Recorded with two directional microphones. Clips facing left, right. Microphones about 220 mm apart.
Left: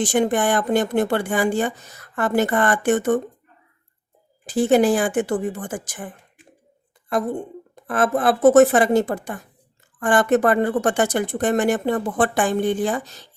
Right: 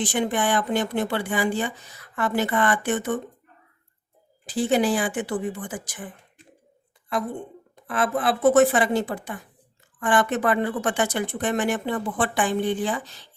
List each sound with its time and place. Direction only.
0.0 s speech: 45° left (ahead or behind)
4.4 s speech: 45° left (ahead or behind)